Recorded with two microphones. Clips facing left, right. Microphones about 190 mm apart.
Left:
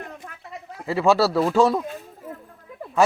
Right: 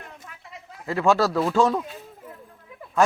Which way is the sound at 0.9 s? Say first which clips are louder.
Left 2 dB; 5° left (ahead or behind).